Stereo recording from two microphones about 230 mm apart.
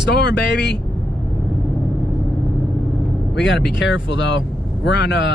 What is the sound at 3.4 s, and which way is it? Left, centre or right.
Speech, left.